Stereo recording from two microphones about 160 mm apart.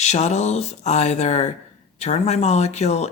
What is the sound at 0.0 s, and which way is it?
Speech, 45° left (ahead or behind).